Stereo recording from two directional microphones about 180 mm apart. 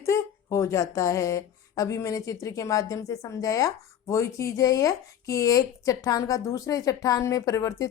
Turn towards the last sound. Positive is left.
turn(degrees=15)  # may be behind; listen again after turning